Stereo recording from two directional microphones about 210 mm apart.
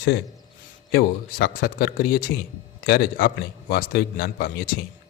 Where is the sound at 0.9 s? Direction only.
45° left (ahead or behind).